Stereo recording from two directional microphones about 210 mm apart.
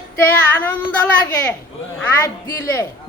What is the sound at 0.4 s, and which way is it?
Speech, 10° left (ahead or behind).